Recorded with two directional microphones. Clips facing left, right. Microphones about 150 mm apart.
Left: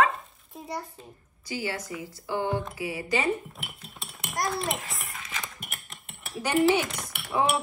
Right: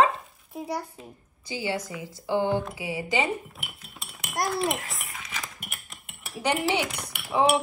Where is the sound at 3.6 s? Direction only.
Centre (ahead or behind).